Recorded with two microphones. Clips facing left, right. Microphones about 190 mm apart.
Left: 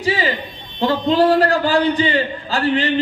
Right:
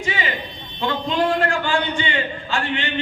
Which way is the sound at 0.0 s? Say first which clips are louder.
Left 6 dB; 35° left (ahead or behind).